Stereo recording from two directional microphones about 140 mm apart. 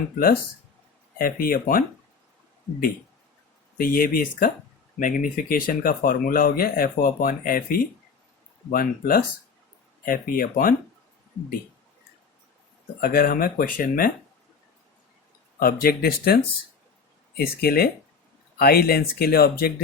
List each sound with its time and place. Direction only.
1.2 s speech: 90° left
3.8 s speech: 90° left
4.9 s speech: 70° left (ahead or behind)
13.0 s speech: 90° left
15.5 s speech: 90° left
17.4 s speech: 90° left